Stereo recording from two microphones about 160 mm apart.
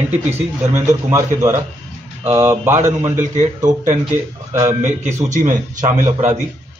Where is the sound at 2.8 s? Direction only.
50° right (ahead or behind).